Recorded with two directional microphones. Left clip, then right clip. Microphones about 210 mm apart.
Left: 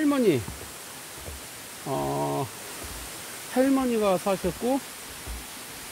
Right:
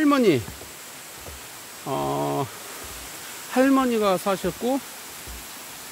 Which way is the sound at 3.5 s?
25° right (ahead or behind).